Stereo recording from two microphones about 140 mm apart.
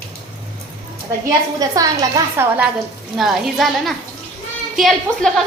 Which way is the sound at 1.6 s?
25° right (ahead or behind).